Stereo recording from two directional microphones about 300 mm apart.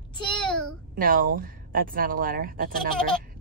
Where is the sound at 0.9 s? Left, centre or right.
Right.